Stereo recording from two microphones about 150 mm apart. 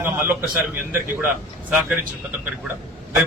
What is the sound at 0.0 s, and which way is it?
Speech, 15° right (ahead or behind).